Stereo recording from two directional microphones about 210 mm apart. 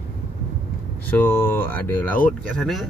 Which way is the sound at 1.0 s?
10° left (ahead or behind).